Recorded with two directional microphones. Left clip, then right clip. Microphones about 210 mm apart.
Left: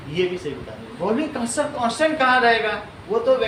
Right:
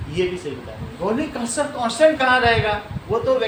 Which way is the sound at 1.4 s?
Centre (ahead or behind).